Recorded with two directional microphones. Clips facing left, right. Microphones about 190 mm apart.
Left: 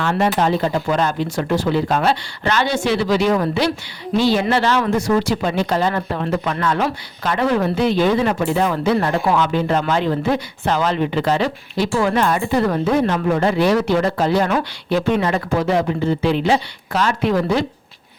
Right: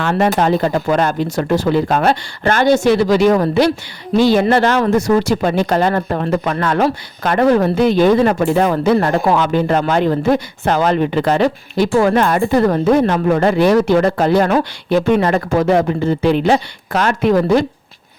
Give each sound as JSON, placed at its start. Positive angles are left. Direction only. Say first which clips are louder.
{"t": 0.0, "sound": "speech", "louder": "right 3 dB", "side_deg": -50}